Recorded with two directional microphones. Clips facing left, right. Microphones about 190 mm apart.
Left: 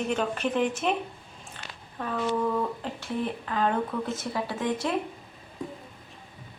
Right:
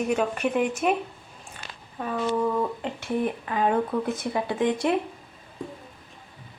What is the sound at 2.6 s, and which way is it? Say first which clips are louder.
Speech: right 3 dB; 20° right (ahead or behind).